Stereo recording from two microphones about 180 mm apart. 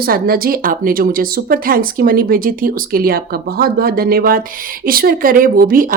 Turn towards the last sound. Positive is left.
turn(degrees=-50)  # may be behind; listen again after turning